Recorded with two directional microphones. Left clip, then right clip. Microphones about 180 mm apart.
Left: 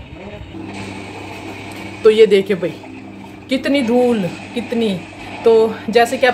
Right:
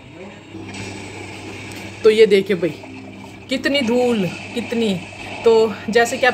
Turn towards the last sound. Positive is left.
turn(degrees=-20)  # may be behind; listen again after turning